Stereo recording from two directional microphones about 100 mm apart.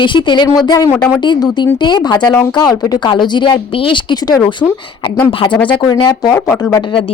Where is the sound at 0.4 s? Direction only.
40° left (ahead or behind); by 4.0 s 65° left (ahead or behind).